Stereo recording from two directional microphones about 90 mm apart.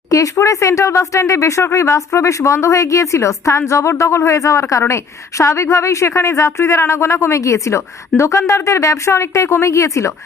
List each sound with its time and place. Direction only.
0.1 s speech: 40° left (ahead or behind)